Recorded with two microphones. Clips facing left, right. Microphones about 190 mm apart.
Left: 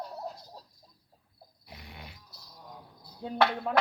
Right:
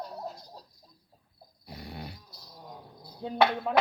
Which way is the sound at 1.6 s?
40° right (ahead or behind).